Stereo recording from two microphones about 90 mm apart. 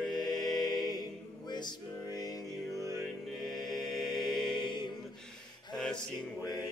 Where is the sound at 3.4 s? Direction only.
Centre (ahead or behind).